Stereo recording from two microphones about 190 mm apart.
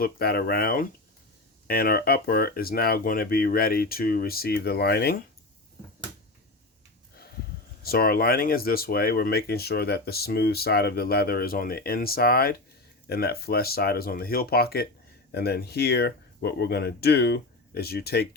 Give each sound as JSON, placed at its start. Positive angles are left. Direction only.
{"t": 0.0, "sound": "speech", "side_deg": 55}
{"t": 7.8, "sound": "speech", "side_deg": 50}